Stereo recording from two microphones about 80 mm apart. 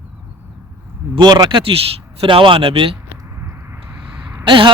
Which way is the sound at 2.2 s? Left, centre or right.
Right.